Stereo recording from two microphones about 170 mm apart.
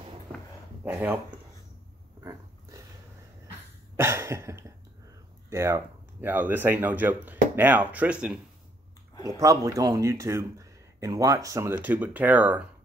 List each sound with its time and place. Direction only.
0.8 s speech: 10° right (ahead or behind)
3.9 s cough: 15° right (ahead or behind)
5.5 s speech: 15° right (ahead or behind)
9.1 s a sound: 25° left (ahead or behind)
9.4 s speech: 20° right (ahead or behind)